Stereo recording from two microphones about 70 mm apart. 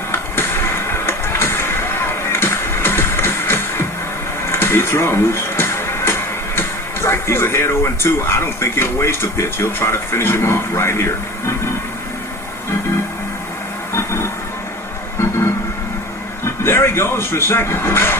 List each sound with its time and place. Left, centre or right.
0.1 s music: left
4.4 s speech: left
13.9 s music: left
16.4 s speech: left